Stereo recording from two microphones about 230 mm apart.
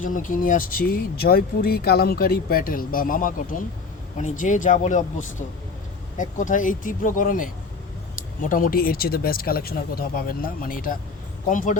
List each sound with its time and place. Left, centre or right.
0.0 s speech: left